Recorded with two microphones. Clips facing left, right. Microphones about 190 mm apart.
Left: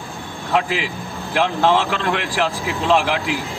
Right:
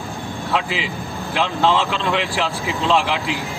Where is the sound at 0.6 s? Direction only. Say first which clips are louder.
Left 6 dB; 55° left (ahead or behind).